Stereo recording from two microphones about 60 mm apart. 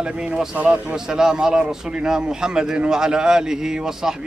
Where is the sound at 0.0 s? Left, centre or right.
Centre.